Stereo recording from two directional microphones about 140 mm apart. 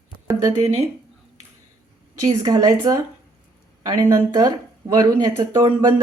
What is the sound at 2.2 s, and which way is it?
A woman's voice, 30° right (ahead or behind).